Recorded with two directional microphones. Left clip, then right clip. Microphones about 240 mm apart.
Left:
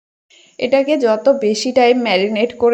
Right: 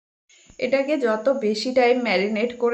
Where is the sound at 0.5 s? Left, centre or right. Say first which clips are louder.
Left 7 dB; left.